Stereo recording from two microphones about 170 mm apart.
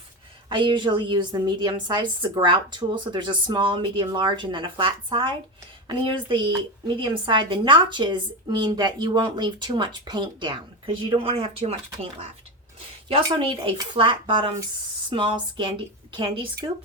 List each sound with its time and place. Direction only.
0.4 s a woman's voice: 30° right (ahead or behind)
13.3 s a woman's voice: 30° right (ahead or behind)